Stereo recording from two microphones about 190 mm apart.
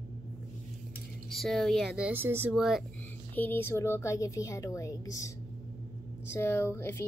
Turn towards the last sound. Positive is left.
turn(degrees=15)  # may be behind; listen again after turning